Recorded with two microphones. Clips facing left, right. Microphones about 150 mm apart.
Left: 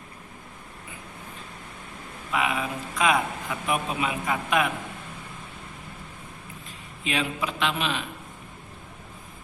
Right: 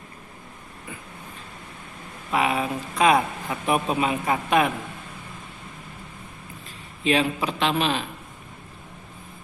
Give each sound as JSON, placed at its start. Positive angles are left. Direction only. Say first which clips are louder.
{"t": 2.3, "sound": "a man's voice", "louder": "right 4 dB", "side_deg": -35}
{"t": 7.0, "sound": "a man's voice", "louder": "right 6 dB", "side_deg": -35}